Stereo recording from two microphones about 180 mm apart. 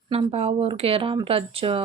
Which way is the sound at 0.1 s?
30° right (ahead or behind).